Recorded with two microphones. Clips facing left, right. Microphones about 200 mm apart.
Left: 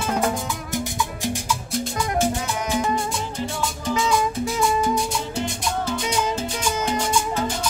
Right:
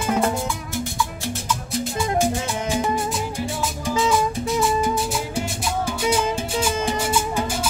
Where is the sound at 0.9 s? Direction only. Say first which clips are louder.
Left 1 dB; 15° left (ahead or behind).